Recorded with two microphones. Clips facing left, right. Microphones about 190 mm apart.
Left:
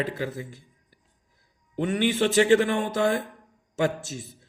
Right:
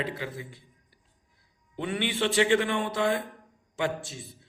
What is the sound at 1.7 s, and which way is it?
A man's voice, 45° left (ahead or behind).